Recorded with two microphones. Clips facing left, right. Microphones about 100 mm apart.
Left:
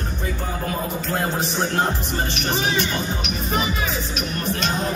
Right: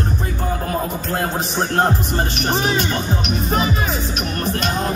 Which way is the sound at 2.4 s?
50° right (ahead or behind).